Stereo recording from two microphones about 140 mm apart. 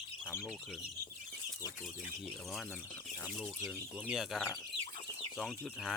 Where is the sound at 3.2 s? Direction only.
Centre (ahead or behind).